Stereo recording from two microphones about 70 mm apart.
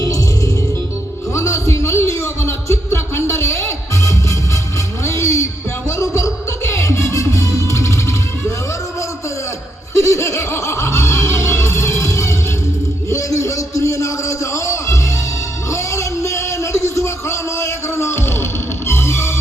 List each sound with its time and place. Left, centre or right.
1.3 s music: left
9.9 s music: left
13.1 s a sound: left
18.9 s music: left